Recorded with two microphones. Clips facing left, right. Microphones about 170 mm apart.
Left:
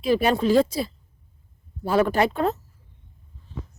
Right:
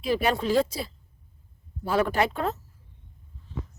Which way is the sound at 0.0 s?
30° left (ahead or behind).